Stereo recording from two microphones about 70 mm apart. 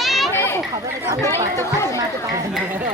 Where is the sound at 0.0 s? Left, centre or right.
Centre.